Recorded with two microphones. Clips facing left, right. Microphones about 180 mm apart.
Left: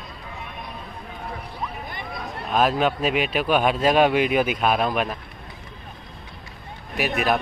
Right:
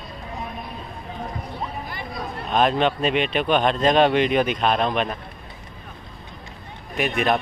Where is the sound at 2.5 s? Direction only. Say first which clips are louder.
Right 1 dB; 5° left (ahead or behind).